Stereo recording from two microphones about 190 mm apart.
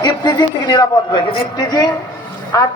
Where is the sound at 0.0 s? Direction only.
20° left (ahead or behind).